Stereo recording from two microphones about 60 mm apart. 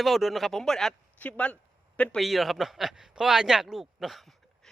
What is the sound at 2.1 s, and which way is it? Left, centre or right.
A man's voice, centre.